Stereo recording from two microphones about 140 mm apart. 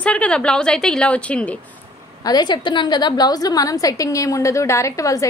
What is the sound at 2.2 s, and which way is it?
A woman's voice, 30° left (ahead or behind).